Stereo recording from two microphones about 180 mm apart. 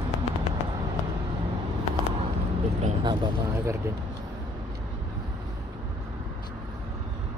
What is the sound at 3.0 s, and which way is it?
Speech, 25° right (ahead or behind).